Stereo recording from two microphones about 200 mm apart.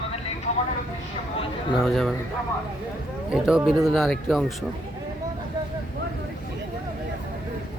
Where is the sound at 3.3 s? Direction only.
5° right (ahead or behind).